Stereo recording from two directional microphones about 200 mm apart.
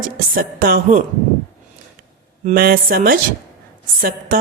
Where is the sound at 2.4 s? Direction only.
45° right (ahead or behind).